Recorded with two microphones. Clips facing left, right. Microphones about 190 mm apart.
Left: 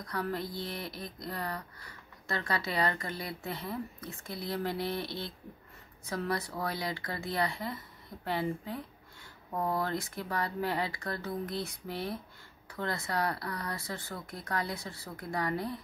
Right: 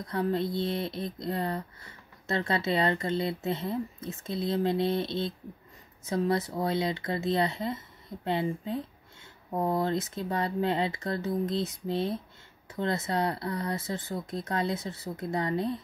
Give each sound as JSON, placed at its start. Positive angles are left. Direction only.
{"t": 0.0, "sound": "speech", "side_deg": -25}